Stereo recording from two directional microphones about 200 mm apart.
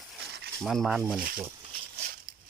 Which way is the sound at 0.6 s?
Centre (ahead or behind).